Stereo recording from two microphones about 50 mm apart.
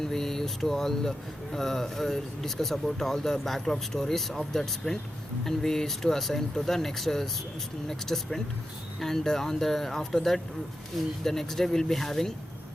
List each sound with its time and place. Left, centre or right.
0.0 s speech: centre
11.2 s speech: centre